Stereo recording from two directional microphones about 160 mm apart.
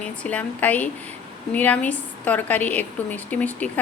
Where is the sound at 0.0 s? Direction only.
10° left (ahead or behind).